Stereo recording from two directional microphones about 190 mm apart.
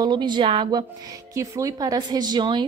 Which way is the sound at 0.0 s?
25° right (ahead or behind).